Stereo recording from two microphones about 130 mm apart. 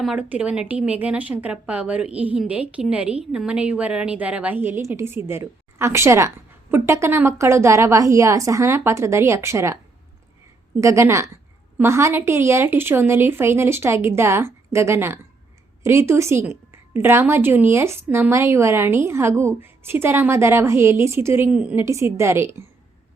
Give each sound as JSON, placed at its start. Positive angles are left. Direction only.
{"t": 0.0, "sound": "a woman's voice", "side_deg": -5}
{"t": 10.8, "sound": "a woman's voice", "side_deg": -20}
{"t": 21.8, "sound": "a woman's voice", "side_deg": -20}